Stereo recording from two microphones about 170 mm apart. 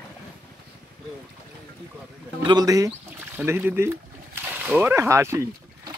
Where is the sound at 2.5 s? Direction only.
20° right (ahead or behind).